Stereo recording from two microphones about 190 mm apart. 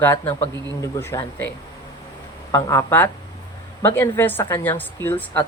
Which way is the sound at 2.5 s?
20° left (ahead or behind).